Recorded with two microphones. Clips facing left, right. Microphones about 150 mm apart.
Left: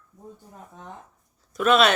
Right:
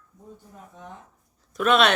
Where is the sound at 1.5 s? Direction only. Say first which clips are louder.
Left 1 dB; centre (ahead or behind).